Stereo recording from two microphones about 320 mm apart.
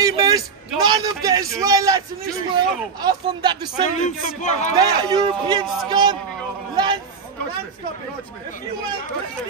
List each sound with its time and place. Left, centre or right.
0.0 s a sound: centre
0.7 s a man's voice: centre
4.0 s speech: left
4.7 s a man's voice: centre